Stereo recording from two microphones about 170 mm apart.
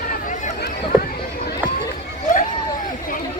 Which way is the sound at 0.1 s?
50° left (ahead or behind).